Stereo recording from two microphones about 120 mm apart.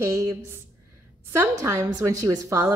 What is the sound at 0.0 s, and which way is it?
A woman's voice, 25° right (ahead or behind).